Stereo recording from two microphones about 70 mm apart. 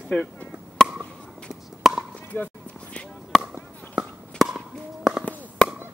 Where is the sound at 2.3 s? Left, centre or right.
Left.